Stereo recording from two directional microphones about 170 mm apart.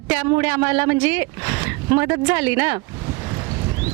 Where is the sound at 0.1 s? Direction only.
10° right (ahead or behind).